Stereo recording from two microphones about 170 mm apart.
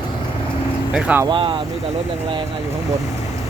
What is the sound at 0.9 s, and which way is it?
Speech, 10° right (ahead or behind).